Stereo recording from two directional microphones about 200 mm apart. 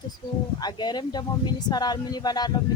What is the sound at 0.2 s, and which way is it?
Speech, 20° left (ahead or behind).